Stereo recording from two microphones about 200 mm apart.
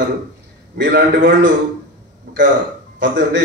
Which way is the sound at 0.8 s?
60° right (ahead or behind).